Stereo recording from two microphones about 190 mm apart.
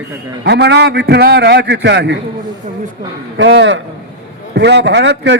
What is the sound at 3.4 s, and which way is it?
A man's voice, 75° right (ahead or behind).